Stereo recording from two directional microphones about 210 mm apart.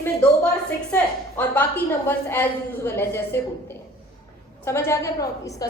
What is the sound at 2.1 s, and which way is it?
A woman's voice, 10° left (ahead or behind).